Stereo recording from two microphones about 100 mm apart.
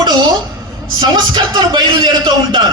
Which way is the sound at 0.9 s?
50° right (ahead or behind).